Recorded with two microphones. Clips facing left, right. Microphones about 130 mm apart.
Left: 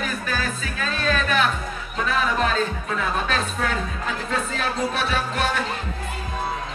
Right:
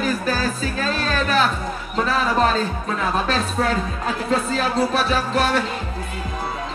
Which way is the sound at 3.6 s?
35° right (ahead or behind).